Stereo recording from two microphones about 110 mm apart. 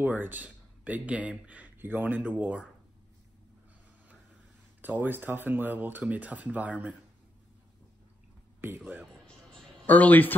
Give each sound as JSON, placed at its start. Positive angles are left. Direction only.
{"t": 0.0, "sound": "speech", "side_deg": -15}
{"t": 4.8, "sound": "speech", "side_deg": -15}
{"t": 8.5, "sound": "speech", "side_deg": -20}
{"t": 9.8, "sound": "speech", "side_deg": 15}